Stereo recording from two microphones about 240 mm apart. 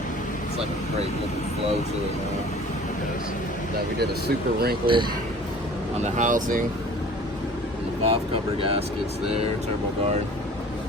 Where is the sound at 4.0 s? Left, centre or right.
Right.